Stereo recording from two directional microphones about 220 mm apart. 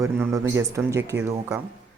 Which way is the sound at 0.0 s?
15° right (ahead or behind).